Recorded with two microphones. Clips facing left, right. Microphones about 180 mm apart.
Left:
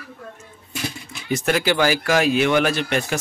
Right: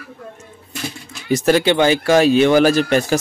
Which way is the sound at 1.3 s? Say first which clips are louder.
Right 6 dB; 35° right (ahead or behind).